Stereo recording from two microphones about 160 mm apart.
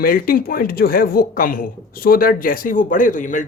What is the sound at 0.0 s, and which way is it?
Speech, 65° left (ahead or behind).